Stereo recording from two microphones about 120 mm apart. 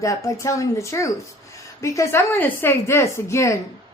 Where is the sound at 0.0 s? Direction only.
25° left (ahead or behind).